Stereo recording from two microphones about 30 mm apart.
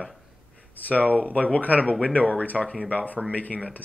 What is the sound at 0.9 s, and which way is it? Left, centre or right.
Speech, left.